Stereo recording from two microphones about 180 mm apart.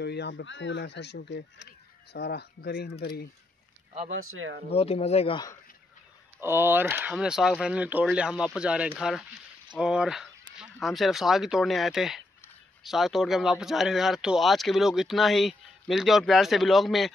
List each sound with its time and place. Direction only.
0.0 s speech: 70° left (ahead or behind)
4.1 s speech: 90° right
4.6 s speech: 35° left (ahead or behind)
6.4 s speech: 15° right (ahead or behind)